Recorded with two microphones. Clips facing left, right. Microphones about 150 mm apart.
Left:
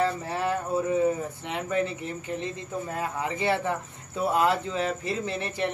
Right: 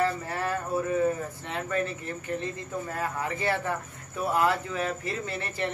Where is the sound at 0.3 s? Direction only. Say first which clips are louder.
Left 2 dB; 20° left (ahead or behind).